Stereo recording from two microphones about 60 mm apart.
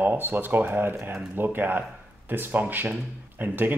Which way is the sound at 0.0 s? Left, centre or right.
Right.